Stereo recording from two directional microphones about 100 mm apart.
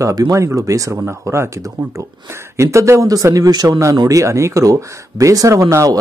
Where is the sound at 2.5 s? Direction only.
30° right (ahead or behind).